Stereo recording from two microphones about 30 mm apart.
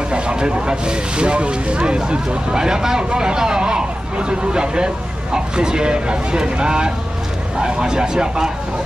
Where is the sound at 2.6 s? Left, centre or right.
Centre.